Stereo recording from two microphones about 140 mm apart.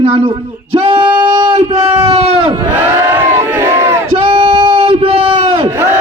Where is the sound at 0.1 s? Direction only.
40° right (ahead or behind).